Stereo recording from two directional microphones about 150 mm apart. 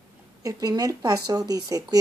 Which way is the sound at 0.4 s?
25° right (ahead or behind).